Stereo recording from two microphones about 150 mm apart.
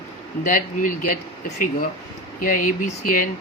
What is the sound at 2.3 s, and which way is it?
Speech, 60° left (ahead or behind).